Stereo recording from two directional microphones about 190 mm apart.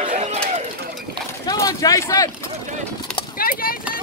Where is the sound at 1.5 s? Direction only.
20° left (ahead or behind).